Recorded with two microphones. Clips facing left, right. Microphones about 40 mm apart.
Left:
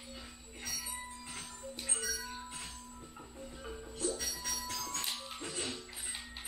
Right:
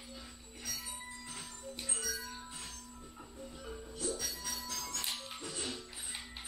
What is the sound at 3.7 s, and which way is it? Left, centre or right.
Music, centre.